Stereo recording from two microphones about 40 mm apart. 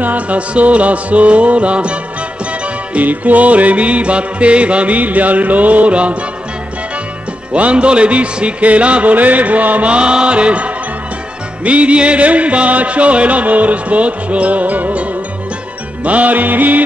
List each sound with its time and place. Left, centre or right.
0.0 s music: right
7.5 s music: right